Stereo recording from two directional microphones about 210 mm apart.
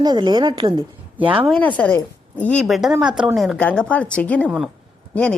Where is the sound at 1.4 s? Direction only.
5° left (ahead or behind).